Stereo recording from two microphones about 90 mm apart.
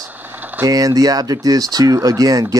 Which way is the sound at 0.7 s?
40° right (ahead or behind).